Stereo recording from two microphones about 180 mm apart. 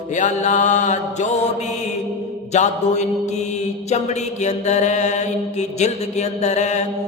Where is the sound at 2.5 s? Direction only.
40° left (ahead or behind).